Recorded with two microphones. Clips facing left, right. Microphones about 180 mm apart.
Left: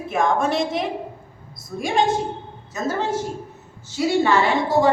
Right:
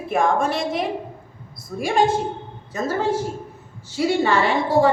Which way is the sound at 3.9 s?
60° right (ahead or behind).